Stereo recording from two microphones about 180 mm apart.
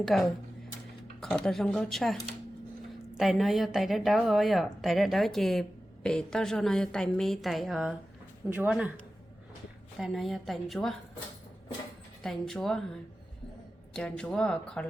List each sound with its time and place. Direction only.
0.0 s a woman's voice: centre (ahead or behind)
10.0 s a woman's voice: centre (ahead or behind)
12.2 s a woman's voice: centre (ahead or behind)
13.9 s a woman's voice: 5° left (ahead or behind)